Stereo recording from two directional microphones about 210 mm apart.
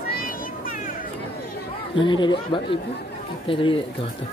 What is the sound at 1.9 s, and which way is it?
Speech, 25° left (ahead or behind).